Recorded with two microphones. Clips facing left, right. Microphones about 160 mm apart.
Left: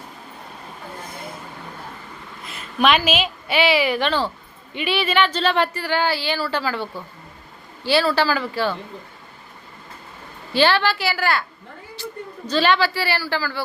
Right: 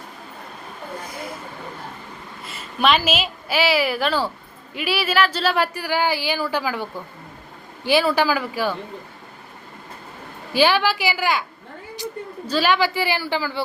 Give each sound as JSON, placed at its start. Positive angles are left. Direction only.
{"t": 2.4, "sound": "a woman's voice", "side_deg": 0}
{"t": 10.5, "sound": "speech", "side_deg": -10}
{"t": 12.5, "sound": "speech", "side_deg": -10}